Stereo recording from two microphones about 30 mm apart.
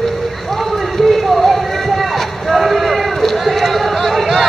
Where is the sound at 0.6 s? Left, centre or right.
Centre.